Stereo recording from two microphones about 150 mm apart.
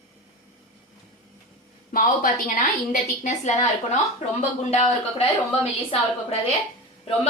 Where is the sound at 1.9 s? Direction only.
65° left (ahead or behind); by 5.3 s 40° left (ahead or behind).